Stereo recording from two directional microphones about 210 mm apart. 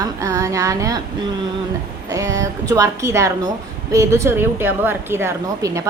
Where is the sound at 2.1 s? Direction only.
15° right (ahead or behind).